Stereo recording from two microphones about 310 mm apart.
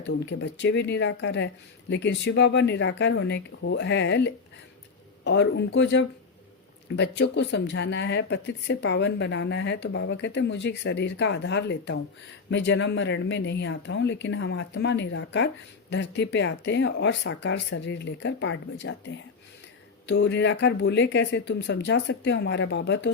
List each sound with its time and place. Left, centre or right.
0.0 s speech: left